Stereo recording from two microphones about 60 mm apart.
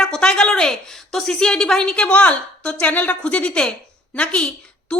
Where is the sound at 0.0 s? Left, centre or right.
Centre.